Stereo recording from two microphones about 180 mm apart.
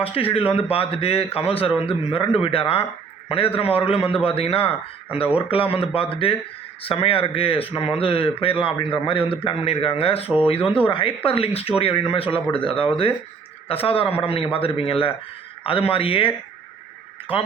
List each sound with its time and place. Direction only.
0.0 s a man's voice: 30° left (ahead or behind)